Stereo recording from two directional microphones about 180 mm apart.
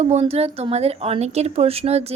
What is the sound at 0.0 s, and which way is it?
A woman's voice, 35° right (ahead or behind).